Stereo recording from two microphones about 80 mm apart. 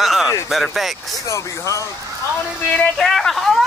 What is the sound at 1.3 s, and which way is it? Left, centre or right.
Speech, left.